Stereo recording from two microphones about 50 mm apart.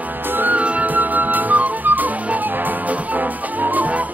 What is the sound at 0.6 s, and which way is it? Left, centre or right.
Music, right.